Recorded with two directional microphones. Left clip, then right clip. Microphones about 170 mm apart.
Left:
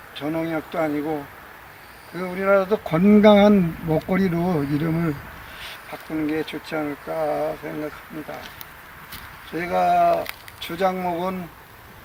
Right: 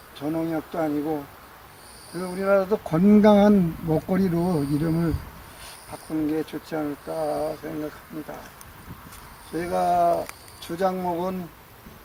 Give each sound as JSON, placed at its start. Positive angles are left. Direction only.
{"t": 0.2, "sound": "speech", "side_deg": 5}
{"t": 4.2, "sound": "speech", "side_deg": 20}
{"t": 4.8, "sound": "speech", "side_deg": 5}
{"t": 6.3, "sound": "speech", "side_deg": 0}
{"t": 6.7, "sound": "speech", "side_deg": 15}
{"t": 9.5, "sound": "speech", "side_deg": 0}